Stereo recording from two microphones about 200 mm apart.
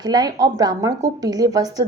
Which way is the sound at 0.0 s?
20° right (ahead or behind).